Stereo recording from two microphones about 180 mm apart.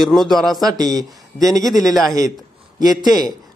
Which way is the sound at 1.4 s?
Centre (ahead or behind).